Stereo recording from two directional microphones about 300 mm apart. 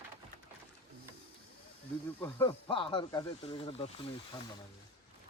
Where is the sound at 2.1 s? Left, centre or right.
Centre.